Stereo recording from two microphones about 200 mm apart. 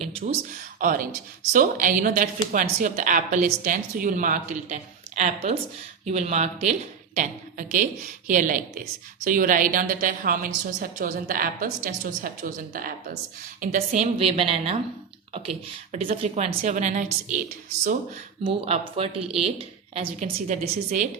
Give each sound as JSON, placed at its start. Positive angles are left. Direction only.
{"t": 0.2, "sound": "a woman's voice", "side_deg": -40}
{"t": 18.4, "sound": "speech", "side_deg": -30}